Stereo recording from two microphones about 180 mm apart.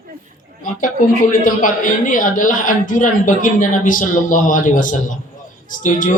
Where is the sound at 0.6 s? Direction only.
45° left (ahead or behind).